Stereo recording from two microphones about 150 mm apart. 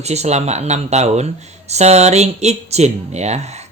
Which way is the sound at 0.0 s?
45° right (ahead or behind).